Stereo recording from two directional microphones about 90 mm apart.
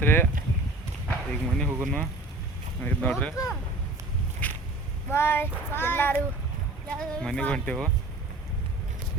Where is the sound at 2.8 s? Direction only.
20° left (ahead or behind).